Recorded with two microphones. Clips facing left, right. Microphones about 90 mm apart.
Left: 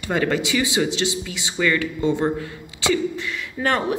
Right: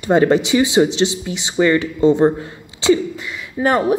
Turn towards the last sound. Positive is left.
turn(degrees=-15)  # may be behind; listen again after turning